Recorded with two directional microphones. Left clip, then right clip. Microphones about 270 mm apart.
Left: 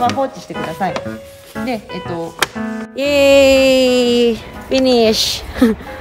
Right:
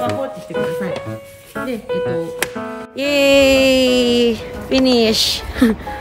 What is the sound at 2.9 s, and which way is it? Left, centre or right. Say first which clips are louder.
A woman's voice: left 3 dB; centre.